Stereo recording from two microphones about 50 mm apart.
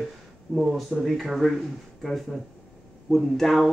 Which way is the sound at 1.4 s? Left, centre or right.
Centre.